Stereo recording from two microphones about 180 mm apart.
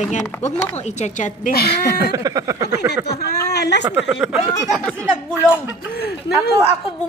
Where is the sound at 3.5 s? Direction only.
65° left (ahead or behind).